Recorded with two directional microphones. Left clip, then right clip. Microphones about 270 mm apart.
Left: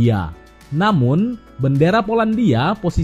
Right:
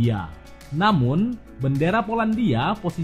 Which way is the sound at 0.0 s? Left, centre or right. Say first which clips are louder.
Left 7 dB; centre.